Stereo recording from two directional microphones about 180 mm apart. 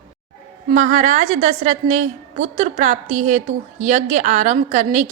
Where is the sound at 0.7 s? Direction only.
45° right (ahead or behind).